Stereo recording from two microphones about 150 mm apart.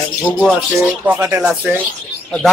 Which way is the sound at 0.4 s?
Centre (ahead or behind).